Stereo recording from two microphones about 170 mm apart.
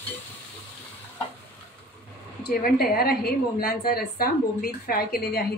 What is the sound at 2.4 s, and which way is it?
A woman's voice, 65° left (ahead or behind).